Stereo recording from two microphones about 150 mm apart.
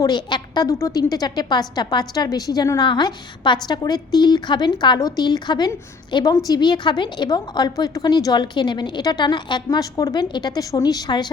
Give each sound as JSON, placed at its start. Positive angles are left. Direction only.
{"t": 0.0, "sound": "a woman's voice", "side_deg": 30}